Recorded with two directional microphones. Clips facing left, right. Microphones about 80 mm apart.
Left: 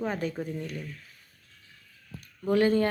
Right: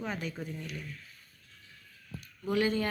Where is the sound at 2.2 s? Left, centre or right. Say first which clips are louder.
Left 6 dB; left.